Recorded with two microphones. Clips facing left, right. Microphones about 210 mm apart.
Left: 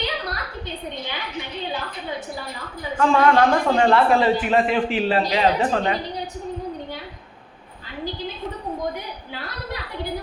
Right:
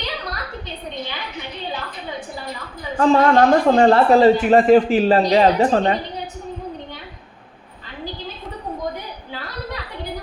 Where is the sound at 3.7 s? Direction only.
40° right (ahead or behind).